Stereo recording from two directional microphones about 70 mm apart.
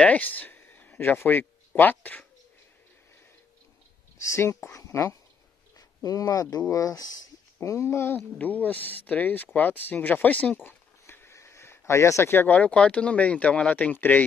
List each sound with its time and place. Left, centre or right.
0.0 s speech: left
4.2 s speech: left
6.0 s speech: left
7.6 s speech: left
8.4 s speech: left
12.4 s speech: centre